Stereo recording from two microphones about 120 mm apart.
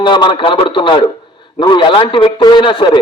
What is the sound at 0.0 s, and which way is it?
A man's voice, 40° left (ahead or behind).